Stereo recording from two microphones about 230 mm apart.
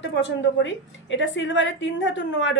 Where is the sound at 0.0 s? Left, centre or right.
Left.